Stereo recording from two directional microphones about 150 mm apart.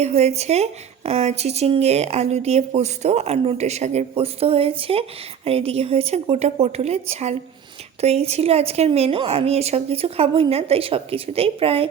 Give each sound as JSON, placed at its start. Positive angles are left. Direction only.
{"t": 0.0, "sound": "a woman's voice", "side_deg": -45}